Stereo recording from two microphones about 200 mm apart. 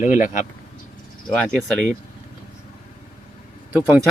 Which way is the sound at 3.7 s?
10° right (ahead or behind).